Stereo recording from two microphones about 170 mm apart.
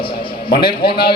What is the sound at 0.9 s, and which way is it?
Speech, 70° left (ahead or behind).